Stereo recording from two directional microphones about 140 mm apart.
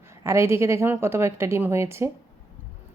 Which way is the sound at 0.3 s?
20° right (ahead or behind).